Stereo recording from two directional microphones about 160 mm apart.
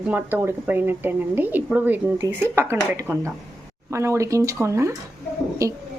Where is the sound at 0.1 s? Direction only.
10° right (ahead or behind).